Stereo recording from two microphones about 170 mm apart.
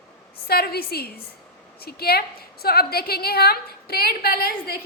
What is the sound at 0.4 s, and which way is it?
A woman's voice, 65° left (ahead or behind).